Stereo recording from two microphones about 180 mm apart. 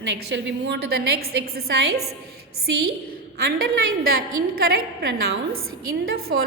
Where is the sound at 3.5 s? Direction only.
55° right (ahead or behind).